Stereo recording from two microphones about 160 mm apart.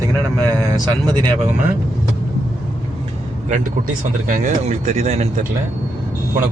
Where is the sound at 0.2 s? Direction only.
20° right (ahead or behind).